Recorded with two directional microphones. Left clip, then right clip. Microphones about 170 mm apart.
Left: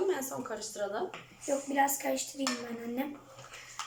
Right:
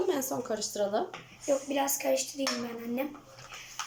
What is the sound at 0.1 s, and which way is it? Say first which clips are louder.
Speech: right 3 dB; 25° right (ahead or behind).